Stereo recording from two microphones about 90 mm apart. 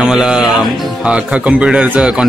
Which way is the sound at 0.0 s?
5° right (ahead or behind).